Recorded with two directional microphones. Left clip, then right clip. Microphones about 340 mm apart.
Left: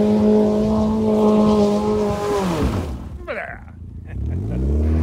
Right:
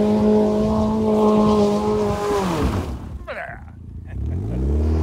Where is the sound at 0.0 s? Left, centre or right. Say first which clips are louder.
Left 1 dB; centre.